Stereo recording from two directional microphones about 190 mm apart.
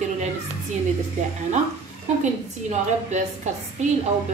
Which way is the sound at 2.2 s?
40° right (ahead or behind).